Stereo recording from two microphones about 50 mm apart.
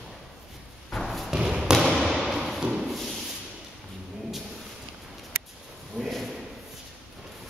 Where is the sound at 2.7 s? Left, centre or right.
Centre.